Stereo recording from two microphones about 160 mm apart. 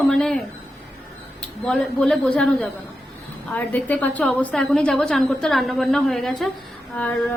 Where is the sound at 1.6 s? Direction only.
5° left (ahead or behind).